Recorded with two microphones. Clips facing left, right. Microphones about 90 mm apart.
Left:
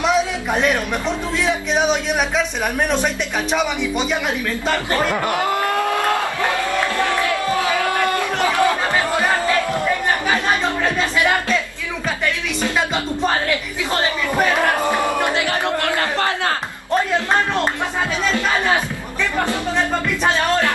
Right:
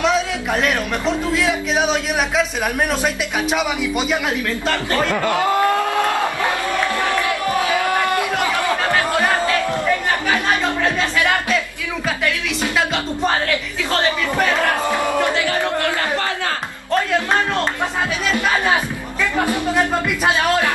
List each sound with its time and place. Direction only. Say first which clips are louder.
0.0 s a man's voice: even; 5° left (ahead or behind)
4.6 s speech: left 1 dB; 10° left (ahead or behind)
7.0 s a sound: even; 20° right (ahead or behind)
15.1 s speech: right 1 dB; 20° left (ahead or behind)
19.3 s speech: right 2 dB; 10° right (ahead or behind)